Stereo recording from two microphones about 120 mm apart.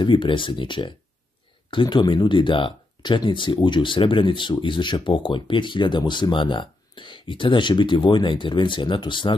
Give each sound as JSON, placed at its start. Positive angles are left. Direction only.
{"t": 0.0, "sound": "speech", "side_deg": 40}